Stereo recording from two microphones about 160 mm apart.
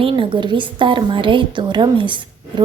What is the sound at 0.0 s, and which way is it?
A woman's voice, 35° right (ahead or behind).